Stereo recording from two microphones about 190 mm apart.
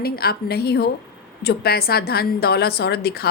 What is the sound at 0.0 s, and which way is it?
Speech, 55° left (ahead or behind).